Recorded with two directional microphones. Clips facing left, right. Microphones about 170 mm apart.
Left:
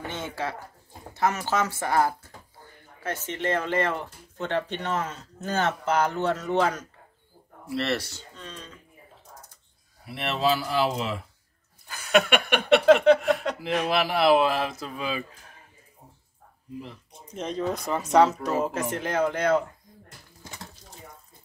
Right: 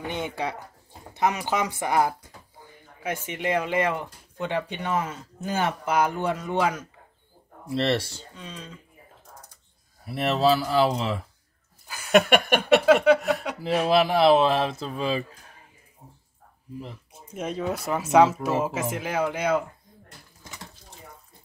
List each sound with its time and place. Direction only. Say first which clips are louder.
0.0 s a sound: right 2 dB; 15° right (ahead or behind)
1.1 s speech: even; 15° right (ahead or behind)
7.7 s speech: right 3 dB; 30° right (ahead or behind)
8.4 s speech: right 2 dB; 10° right (ahead or behind)
10.0 s speech: right 4 dB; 40° right (ahead or behind)
12.3 s a sound: right 4 dB; 45° right (ahead or behind)
12.8 s a sound: left 3 dB; 10° right (ahead or behind)
13.3 s chuckle: even; 5° right (ahead or behind)
13.8 s speech: right 3 dB; 30° right (ahead or behind)
17.1 s speech: right 1 dB; 10° right (ahead or behind)